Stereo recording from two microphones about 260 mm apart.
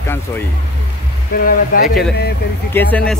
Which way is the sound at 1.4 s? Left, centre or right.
Left.